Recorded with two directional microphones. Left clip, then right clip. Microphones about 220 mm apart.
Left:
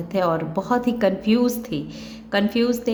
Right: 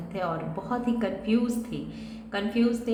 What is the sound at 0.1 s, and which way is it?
A woman's voice, 50° left (ahead or behind).